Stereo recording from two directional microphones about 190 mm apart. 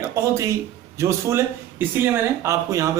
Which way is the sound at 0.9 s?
15° right (ahead or behind).